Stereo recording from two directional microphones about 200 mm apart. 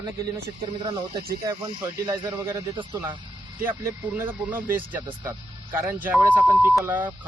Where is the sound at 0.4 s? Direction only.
20° right (ahead or behind).